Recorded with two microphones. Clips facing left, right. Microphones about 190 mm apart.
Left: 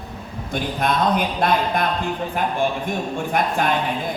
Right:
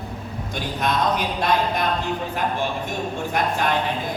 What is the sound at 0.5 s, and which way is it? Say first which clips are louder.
A man's voice: left 3 dB; 50° left (ahead or behind).